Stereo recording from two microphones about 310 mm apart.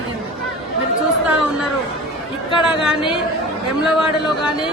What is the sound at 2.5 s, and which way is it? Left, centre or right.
Speech, centre.